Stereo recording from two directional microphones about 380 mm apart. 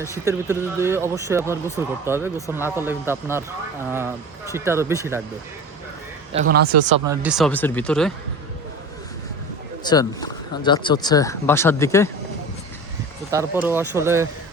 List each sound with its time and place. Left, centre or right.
0.3 s speech: centre
6.3 s speech: right
7.0 s speech: centre
9.8 s speech: centre
13.3 s speech: centre